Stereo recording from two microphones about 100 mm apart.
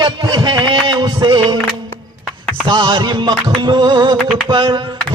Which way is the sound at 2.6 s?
50° right (ahead or behind).